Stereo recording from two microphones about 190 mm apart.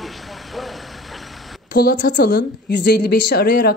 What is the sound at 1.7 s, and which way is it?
A woman's voice, 55° left (ahead or behind).